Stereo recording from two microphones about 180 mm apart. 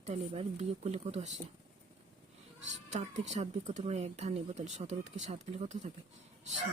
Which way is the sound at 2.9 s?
40° right (ahead or behind).